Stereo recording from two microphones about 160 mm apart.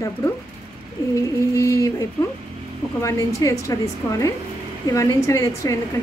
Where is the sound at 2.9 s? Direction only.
20° left (ahead or behind).